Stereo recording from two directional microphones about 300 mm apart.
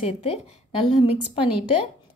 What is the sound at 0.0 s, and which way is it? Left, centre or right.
A woman's voice, centre.